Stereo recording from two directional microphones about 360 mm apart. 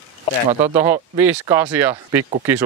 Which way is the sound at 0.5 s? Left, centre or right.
Centre.